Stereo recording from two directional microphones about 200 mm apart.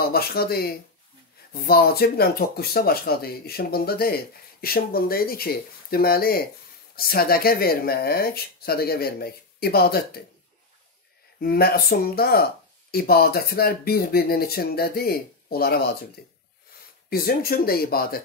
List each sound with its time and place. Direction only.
0.0 s speech: 50° left (ahead or behind)
11.3 s speech: 50° left (ahead or behind)
17.1 s speech: 50° left (ahead or behind)